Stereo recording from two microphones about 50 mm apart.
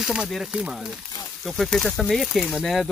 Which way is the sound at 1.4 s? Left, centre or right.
Centre.